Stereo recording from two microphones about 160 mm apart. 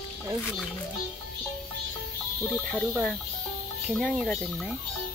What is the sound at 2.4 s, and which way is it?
Speech, centre (ahead or behind).